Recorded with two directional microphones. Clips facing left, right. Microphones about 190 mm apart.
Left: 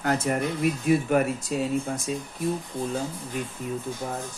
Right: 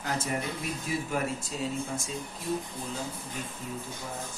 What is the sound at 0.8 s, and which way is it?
Speech, 65° left (ahead or behind).